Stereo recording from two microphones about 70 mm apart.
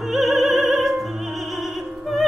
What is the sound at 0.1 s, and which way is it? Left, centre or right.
Opera, centre.